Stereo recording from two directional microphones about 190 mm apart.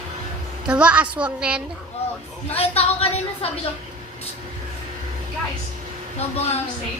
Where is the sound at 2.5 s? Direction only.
30° left (ahead or behind).